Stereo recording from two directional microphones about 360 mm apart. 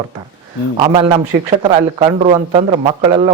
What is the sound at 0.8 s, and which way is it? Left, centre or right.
Speech, centre.